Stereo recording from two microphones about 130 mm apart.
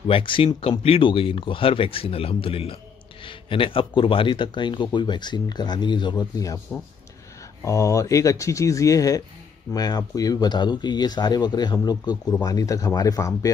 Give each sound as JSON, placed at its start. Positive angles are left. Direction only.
{"t": 0.1, "sound": "speech", "side_deg": 40}
{"t": 7.6, "sound": "speech", "side_deg": 25}